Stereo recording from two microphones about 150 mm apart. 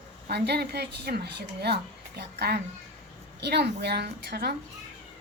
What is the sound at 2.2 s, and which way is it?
A woman's voice, 90° right.